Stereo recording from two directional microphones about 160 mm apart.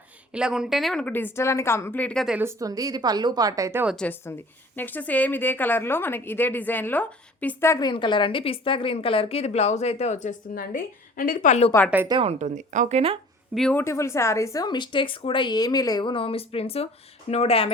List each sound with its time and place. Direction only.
0.3 s a woman's voice: 5° right (ahead or behind)
2.4 s a woman's voice: 20° right (ahead or behind)
3.8 s a woman's voice: 5° left (ahead or behind); by 10.3 s 45° left (ahead or behind)
10.5 s a woman's voice: 65° left (ahead or behind); by 11.7 s 45° left (ahead or behind)
12.0 s speech: 35° right (ahead or behind)
13.5 s speech: centre (ahead or behind)
13.7 s a woman's voice: 15° left (ahead or behind); by 17.7 s 40° left (ahead or behind)